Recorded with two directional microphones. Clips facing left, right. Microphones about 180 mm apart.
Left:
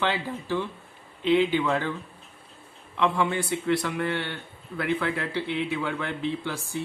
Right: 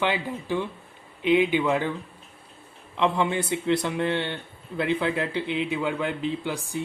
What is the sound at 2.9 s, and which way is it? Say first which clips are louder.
A man's voice: right 1 dB; 20° right (ahead or behind).